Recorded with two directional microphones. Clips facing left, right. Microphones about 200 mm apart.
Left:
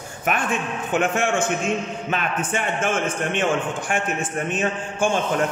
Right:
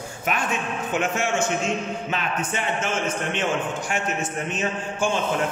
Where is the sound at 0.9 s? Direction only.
55° left (ahead or behind).